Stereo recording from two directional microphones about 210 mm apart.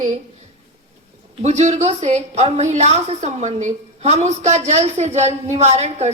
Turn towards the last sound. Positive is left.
turn(degrees=-30)  # may be behind; listen again after turning